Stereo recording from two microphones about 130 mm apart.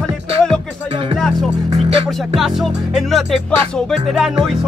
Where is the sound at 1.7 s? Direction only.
50° right (ahead or behind).